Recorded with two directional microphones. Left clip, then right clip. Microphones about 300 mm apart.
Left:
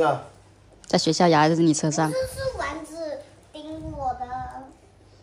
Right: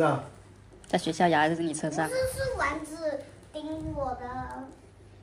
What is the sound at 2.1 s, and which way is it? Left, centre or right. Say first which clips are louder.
Speech: left 2 dB; centre.